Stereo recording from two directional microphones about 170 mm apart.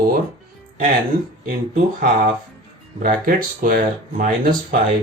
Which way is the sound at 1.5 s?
55° right (ahead or behind).